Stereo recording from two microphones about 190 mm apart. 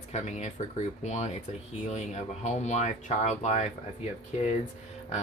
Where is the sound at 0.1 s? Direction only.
35° left (ahead or behind).